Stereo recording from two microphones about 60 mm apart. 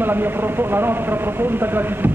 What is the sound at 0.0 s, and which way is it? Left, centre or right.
Speech, right.